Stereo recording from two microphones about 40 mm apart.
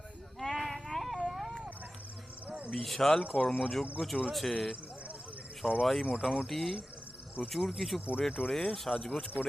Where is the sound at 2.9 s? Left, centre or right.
Centre.